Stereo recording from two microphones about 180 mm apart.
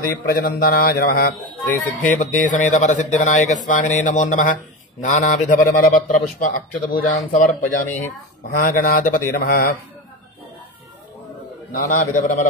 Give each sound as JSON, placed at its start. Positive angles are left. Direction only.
{"t": 0.0, "sound": "a man's voice", "side_deg": 55}
{"t": 11.7, "sound": "speech", "side_deg": 45}